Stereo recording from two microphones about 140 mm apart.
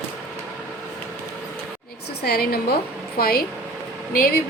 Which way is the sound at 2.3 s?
90° left.